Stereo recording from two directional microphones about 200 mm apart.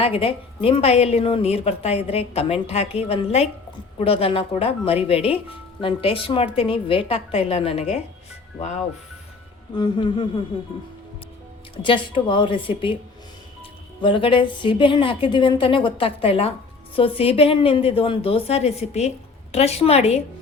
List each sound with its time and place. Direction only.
0.0 s a woman's voice: 30° left (ahead or behind)
4.0 s a woman's voice: 30° left (ahead or behind)
9.7 s a woman's voice: 25° left (ahead or behind)
11.8 s a woman's voice: 25° left (ahead or behind)
14.0 s a woman's voice: 25° left (ahead or behind)